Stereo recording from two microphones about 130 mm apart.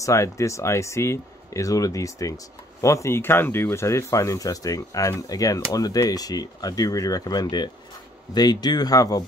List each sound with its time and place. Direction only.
0.0 s speech: 25° left (ahead or behind)